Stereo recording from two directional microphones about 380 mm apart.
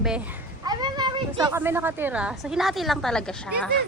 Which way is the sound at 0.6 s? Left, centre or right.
Centre.